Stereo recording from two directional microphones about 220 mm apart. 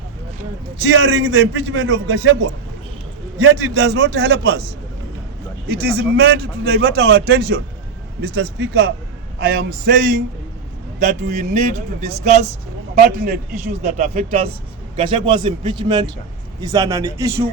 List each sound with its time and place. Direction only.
0.8 s a man's voice: 55° right (ahead or behind)
5.6 s a man's voice: 50° right (ahead or behind); by 12.5 s 30° right (ahead or behind)
13.0 s a man's voice: 40° right (ahead or behind); by 17.4 s 15° right (ahead or behind)